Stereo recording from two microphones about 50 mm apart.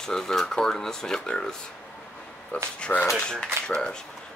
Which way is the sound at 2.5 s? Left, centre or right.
Left.